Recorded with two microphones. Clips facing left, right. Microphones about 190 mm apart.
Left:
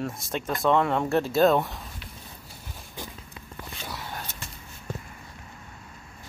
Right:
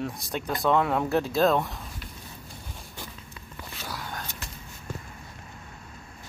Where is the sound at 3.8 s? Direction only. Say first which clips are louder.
Right 1 dB; centre (ahead or behind).